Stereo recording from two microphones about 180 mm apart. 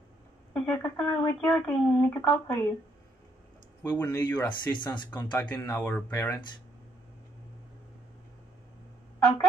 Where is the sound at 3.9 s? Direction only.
10° left (ahead or behind).